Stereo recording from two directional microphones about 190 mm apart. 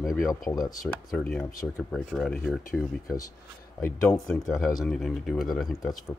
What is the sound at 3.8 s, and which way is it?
Speech, 10° left (ahead or behind).